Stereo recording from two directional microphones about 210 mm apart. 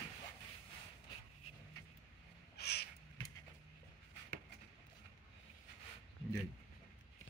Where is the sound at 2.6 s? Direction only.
50° left (ahead or behind).